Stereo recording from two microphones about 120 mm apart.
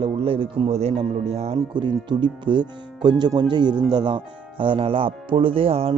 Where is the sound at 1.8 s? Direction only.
40° right (ahead or behind).